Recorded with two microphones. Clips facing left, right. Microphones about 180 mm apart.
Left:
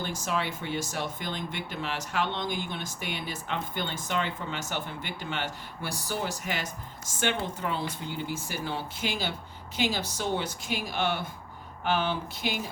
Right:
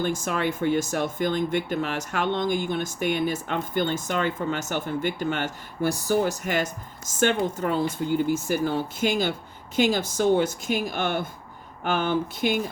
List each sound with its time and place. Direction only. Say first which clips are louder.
0.0 s speech: right 6 dB; 50° right (ahead or behind)